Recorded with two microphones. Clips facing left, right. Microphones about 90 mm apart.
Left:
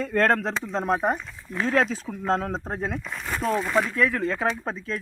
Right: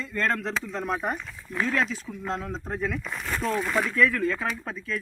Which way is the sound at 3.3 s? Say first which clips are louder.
Left 3 dB; 20° left (ahead or behind).